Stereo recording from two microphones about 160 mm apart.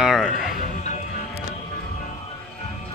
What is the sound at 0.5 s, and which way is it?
Music, 45° left (ahead or behind).